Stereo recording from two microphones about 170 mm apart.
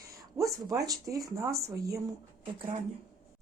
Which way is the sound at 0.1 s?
20° right (ahead or behind).